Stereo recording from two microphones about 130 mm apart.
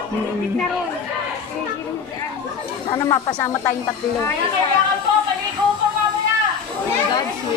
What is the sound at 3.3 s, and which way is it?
Speech, 15° left (ahead or behind).